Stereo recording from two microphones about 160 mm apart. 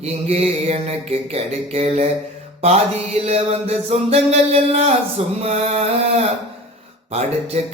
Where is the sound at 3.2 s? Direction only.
40° right (ahead or behind).